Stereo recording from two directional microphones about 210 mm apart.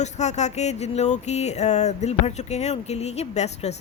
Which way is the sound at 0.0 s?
35° left (ahead or behind).